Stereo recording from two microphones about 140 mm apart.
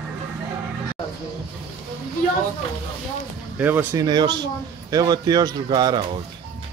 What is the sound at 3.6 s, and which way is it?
Speech, 15° right (ahead or behind).